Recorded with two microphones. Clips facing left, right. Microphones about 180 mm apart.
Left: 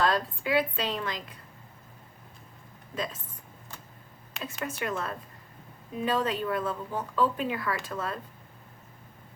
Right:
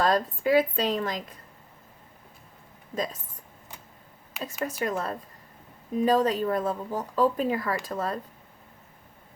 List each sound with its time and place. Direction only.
0.0 s a woman's voice: 45° right (ahead or behind)
2.9 s speech: 40° right (ahead or behind)
4.4 s speech: 5° right (ahead or behind)
4.8 s speech: 40° right (ahead or behind)